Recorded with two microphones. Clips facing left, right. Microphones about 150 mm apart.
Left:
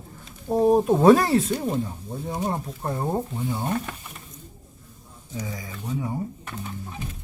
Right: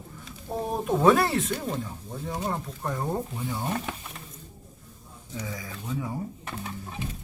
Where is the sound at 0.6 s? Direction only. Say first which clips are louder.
Left 6 dB; 40° left (ahead or behind).